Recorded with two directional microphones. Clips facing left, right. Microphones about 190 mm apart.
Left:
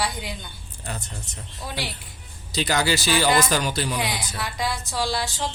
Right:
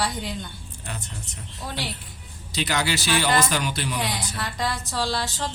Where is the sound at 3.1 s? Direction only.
10° left (ahead or behind).